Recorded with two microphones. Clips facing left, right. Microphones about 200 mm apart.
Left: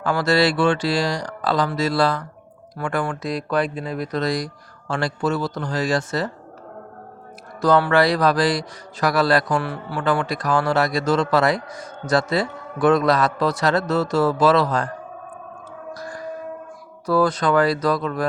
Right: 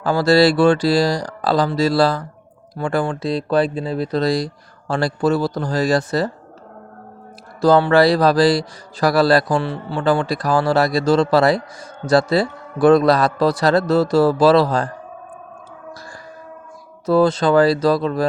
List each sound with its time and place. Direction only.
0.0 s a man's voice: 30° right (ahead or behind)
7.6 s a man's voice: 30° right (ahead or behind)
16.0 s music: 30° right (ahead or behind)
17.1 s speech: 25° right (ahead or behind)